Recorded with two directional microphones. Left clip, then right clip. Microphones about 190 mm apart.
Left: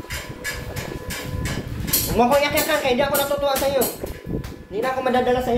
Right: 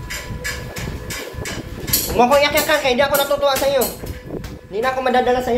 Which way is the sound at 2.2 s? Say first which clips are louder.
Right 4 dB; centre (ahead or behind).